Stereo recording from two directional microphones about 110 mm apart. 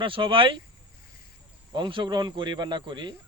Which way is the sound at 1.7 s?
45° right (ahead or behind).